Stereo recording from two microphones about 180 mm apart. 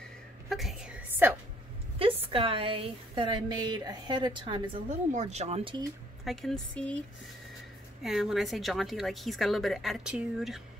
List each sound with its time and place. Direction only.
0.5 s a sound: centre (ahead or behind)
2.0 s a woman's voice: 30° right (ahead or behind)
5.1 s speech: 40° right (ahead or behind)
6.2 s a woman's voice: centre (ahead or behind)
8.0 s a woman's voice: centre (ahead or behind)